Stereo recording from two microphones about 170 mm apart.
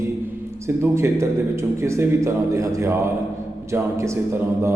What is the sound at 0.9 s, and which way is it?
A man's voice, 15° right (ahead or behind).